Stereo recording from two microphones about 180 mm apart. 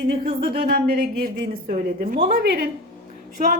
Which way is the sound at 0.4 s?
60° right (ahead or behind).